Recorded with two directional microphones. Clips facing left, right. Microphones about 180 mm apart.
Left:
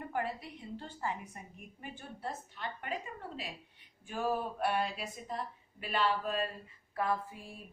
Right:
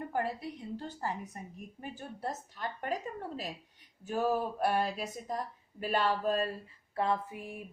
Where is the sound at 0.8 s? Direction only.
40° right (ahead or behind).